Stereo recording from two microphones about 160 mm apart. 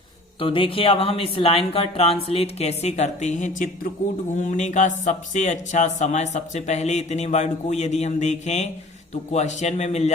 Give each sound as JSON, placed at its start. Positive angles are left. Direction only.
{"t": 0.3, "sound": "speech", "side_deg": 35}